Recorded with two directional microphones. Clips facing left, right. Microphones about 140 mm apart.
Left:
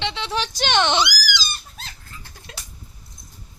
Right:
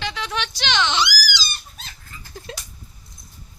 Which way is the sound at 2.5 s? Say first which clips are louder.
Right 6 dB; 30° right (ahead or behind).